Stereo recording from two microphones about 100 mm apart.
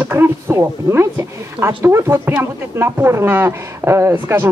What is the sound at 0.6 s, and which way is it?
Speech, 25° right (ahead or behind).